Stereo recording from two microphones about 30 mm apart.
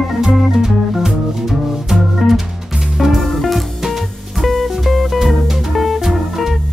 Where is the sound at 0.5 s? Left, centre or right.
Centre.